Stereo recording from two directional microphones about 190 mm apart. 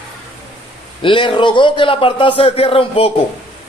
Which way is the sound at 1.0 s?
25° left (ahead or behind).